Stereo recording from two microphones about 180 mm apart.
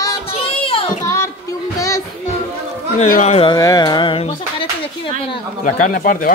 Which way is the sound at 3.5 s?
20° left (ahead or behind).